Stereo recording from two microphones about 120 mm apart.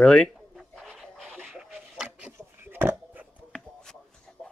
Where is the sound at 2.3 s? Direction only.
20° right (ahead or behind).